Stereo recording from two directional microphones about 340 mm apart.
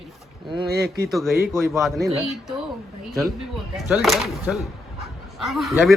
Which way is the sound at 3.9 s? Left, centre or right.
Centre.